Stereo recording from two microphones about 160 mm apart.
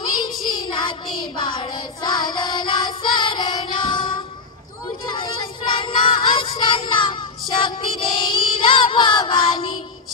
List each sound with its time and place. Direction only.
0.0 s child singing: 25° left (ahead or behind)